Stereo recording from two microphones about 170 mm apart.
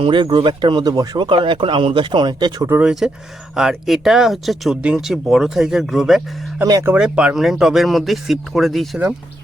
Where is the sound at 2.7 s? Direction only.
5° right (ahead or behind).